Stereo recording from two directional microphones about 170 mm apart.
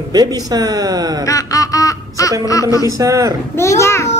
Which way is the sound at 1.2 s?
20° left (ahead or behind).